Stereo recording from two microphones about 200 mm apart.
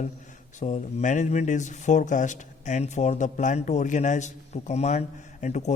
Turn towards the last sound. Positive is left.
turn(degrees=35)  # may be behind; listen again after turning